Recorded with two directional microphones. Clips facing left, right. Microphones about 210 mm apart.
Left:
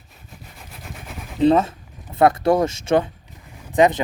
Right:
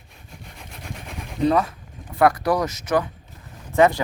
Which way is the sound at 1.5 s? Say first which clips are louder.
Left 4 dB; 25° left (ahead or behind).